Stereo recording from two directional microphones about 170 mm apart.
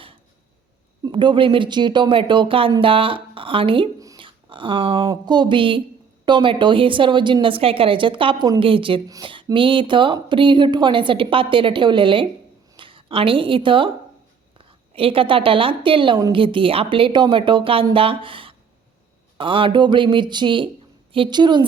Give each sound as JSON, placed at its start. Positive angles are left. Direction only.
{"t": 1.0, "sound": "a woman's voice", "side_deg": -25}